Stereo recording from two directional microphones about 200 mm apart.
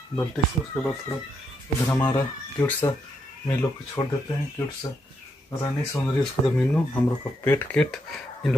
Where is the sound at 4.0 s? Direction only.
5° left (ahead or behind).